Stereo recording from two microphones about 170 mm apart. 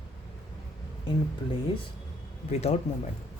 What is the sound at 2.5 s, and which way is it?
Speech, 40° left (ahead or behind).